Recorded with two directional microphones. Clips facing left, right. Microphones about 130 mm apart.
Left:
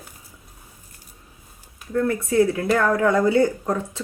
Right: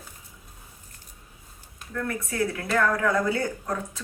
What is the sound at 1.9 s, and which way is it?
Speech, 30° left (ahead or behind).